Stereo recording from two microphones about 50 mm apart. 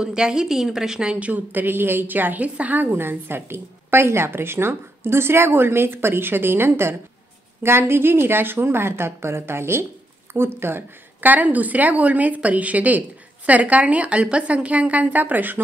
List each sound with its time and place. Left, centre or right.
0.0 s a woman's voice: centre
1.3 s a woman's voice: right
11.1 s a woman's voice: right